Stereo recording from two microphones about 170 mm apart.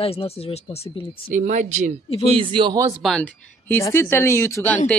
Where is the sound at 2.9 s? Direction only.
Centre (ahead or behind).